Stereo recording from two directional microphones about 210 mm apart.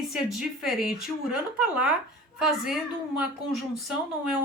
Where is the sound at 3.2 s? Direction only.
Centre (ahead or behind).